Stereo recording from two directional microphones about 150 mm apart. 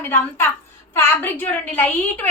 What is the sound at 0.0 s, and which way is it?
A woman's voice, 15° left (ahead or behind).